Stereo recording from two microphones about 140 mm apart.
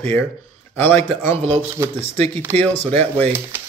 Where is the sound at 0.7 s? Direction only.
15° left (ahead or behind).